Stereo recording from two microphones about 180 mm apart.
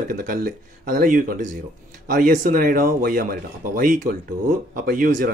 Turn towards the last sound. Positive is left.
turn(degrees=-50)  # may be behind; listen again after turning